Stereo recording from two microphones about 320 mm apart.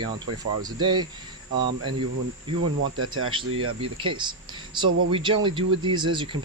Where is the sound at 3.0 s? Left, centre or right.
Right.